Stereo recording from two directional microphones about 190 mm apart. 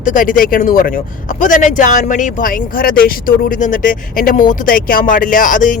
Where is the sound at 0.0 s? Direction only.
45° left (ahead or behind).